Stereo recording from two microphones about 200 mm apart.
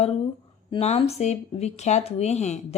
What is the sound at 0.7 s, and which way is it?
Speech, 30° left (ahead or behind).